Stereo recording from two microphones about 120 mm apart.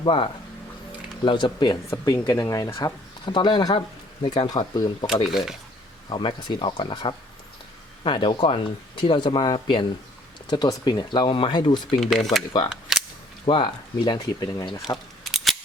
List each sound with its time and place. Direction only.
0.0 s speech: 45° left (ahead or behind)
1.9 s speech: 25° left (ahead or behind)
3.8 s speech: 50° left (ahead or behind)
4.4 s speech: 35° left (ahead or behind)
5.0 s speech: 5° right (ahead or behind)
6.1 s speech: 40° left (ahead or behind)
11.9 s speech: centre (ahead or behind)
12.9 s cap gun: centre (ahead or behind)
13.4 s speech: 45° left (ahead or behind)
15.2 s camera: centre (ahead or behind)